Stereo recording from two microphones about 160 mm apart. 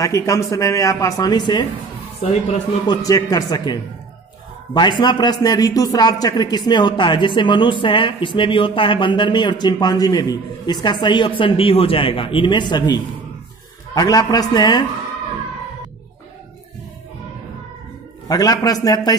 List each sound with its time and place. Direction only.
0.0 s a man's voice: 20° left (ahead or behind)
2.9 s a man's voice: 20° left (ahead or behind)
18.3 s a man's voice: 25° left (ahead or behind)